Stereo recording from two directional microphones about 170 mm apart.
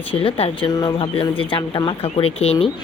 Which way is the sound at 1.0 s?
35° left (ahead or behind).